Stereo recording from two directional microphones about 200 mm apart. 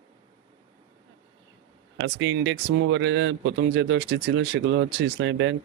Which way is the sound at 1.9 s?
65° right (ahead or behind).